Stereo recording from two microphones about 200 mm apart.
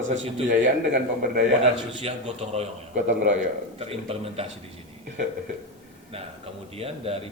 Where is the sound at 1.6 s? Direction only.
30° right (ahead or behind).